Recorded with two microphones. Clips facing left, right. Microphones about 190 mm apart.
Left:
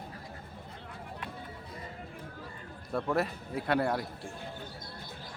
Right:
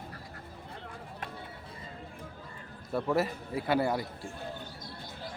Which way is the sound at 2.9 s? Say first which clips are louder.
Right 1 dB; centre (ahead or behind).